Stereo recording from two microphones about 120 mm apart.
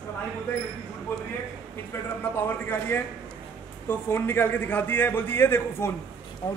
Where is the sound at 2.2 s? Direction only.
20° left (ahead or behind).